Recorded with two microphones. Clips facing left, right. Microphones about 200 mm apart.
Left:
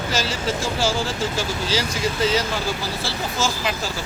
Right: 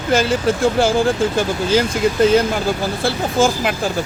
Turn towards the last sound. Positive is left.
turn(degrees=-55)  # may be behind; listen again after turning